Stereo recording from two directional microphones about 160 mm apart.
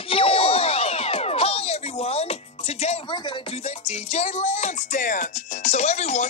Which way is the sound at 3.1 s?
30° left (ahead or behind).